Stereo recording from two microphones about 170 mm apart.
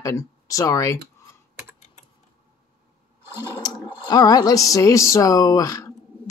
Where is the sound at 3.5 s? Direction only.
25° left (ahead or behind).